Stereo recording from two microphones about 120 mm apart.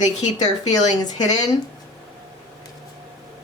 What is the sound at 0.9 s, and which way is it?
Speech, 35° left (ahead or behind).